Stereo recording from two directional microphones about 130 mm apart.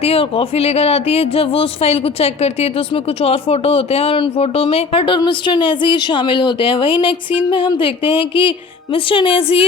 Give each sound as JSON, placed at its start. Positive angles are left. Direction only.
{"t": 0.0, "sound": "speech", "side_deg": 45}